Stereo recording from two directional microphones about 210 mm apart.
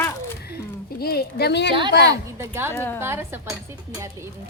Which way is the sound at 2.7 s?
10° left (ahead or behind).